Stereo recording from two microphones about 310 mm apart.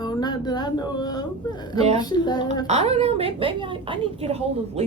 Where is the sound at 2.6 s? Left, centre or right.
Right.